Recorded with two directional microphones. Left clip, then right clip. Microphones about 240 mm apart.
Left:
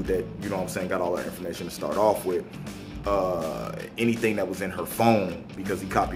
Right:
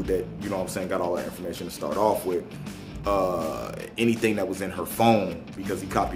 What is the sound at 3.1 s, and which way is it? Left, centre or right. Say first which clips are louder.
A man's voice: right 1 dB; centre.